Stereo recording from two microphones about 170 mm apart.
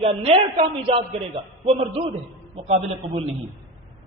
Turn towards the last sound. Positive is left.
turn(degrees=-40)  # may be behind; listen again after turning